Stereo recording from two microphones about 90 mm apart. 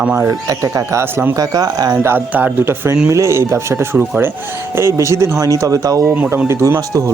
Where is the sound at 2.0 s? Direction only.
25° right (ahead or behind); by 6.1 s 40° right (ahead or behind).